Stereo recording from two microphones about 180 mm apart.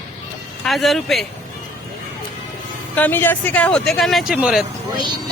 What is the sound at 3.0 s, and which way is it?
Speech, 10° left (ahead or behind).